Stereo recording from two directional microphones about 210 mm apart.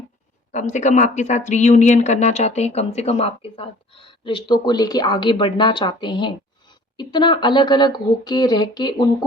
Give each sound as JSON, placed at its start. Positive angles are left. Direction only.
{"t": 0.5, "sound": "speech", "side_deg": 35}